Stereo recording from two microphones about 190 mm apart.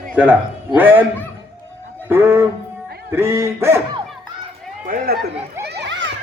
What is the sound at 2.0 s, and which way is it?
Music, 10° right (ahead or behind).